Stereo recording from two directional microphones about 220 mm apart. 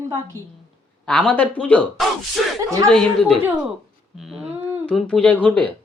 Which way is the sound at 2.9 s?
5° left (ahead or behind).